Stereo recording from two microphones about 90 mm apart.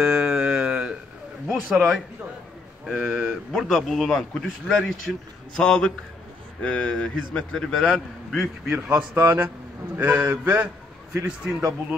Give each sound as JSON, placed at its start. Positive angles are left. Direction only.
{"t": 0.0, "sound": "a sound", "side_deg": -5}
{"t": 1.5, "sound": "a man's voice", "side_deg": 0}
{"t": 8.6, "sound": "a man's voice", "side_deg": -10}
{"t": 11.2, "sound": "speech", "side_deg": -10}